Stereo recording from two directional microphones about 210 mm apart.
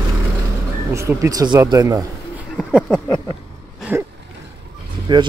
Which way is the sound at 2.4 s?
5° right (ahead or behind).